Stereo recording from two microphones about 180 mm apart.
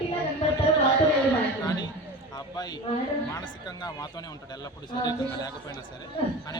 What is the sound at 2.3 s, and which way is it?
A man's voice, 20° left (ahead or behind).